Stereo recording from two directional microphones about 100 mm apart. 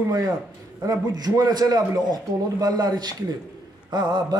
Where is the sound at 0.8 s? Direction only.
40° right (ahead or behind).